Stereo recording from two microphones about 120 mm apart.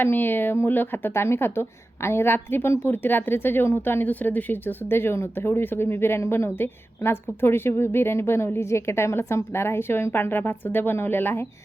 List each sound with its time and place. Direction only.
0.0 s a woman's voice: 15° left (ahead or behind)